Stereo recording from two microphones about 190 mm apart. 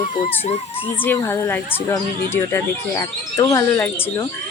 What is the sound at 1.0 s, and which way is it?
Speech, 10° left (ahead or behind).